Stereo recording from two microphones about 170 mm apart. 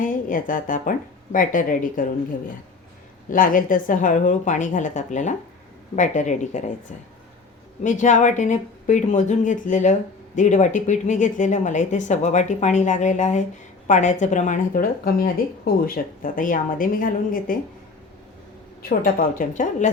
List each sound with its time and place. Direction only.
0.0 s a woman's voice: 50° left (ahead or behind)
3.2 s speech: 55° left (ahead or behind)
7.9 s speech: 45° left (ahead or behind)
18.8 s a woman's voice: 60° left (ahead or behind)